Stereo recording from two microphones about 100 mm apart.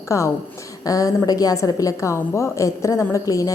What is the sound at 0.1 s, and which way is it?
A woman's voice, 30° left (ahead or behind).